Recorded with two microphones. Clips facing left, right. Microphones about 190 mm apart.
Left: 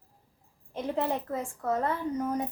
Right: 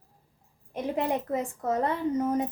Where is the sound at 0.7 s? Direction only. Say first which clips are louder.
Right 2 dB; 15° right (ahead or behind).